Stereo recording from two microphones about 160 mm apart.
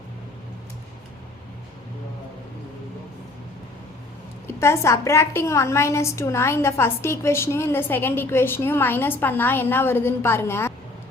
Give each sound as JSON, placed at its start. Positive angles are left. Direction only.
{"t": 4.6, "sound": "a woman's voice", "side_deg": 15}